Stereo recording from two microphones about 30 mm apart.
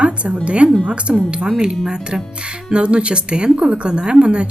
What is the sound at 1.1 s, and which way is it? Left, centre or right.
Speech, right.